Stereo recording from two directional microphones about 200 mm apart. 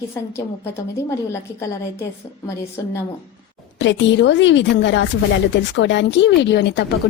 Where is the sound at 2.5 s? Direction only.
15° left (ahead or behind).